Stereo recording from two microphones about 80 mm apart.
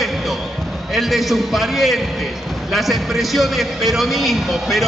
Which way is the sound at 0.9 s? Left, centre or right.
Centre.